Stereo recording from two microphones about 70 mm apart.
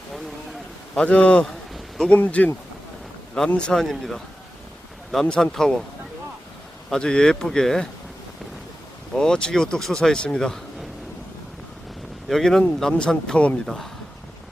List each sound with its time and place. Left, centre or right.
0.9 s speech: centre
3.5 s speech: centre
5.2 s speech: centre
6.9 s speech: centre
9.1 s speech: centre
12.3 s speech: centre